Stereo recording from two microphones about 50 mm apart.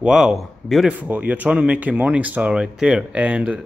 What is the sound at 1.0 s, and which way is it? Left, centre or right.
Speech, right.